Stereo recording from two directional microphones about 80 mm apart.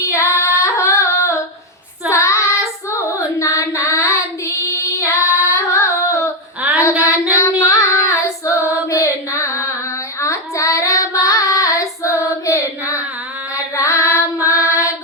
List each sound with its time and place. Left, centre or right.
0.1 s female singing: left
2.0 s child singing: left
6.6 s female singing: centre
7.3 s child singing: left
13.5 s female singing: left
14.5 s music: left